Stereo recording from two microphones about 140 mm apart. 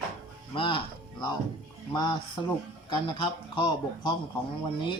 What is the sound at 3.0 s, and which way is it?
Speech, 35° left (ahead or behind).